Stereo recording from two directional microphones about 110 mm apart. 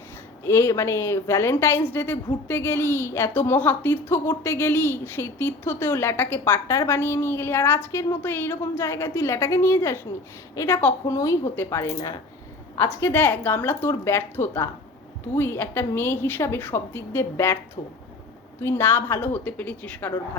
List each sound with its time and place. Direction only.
0.4 s a woman's voice: 25° left (ahead or behind)
11.9 s speech: 35° left (ahead or behind)
13.0 s a woman's voice: 20° left (ahead or behind)
18.6 s a woman's voice: 20° left (ahead or behind)